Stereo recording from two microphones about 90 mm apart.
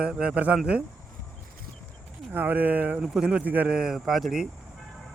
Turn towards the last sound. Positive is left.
turn(degrees=-5)  # may be behind; listen again after turning